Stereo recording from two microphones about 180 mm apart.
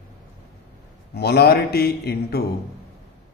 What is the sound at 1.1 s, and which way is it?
A man's voice, 65° left (ahead or behind).